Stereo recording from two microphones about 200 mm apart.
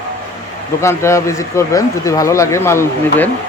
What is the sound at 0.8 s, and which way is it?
Speech, 15° left (ahead or behind).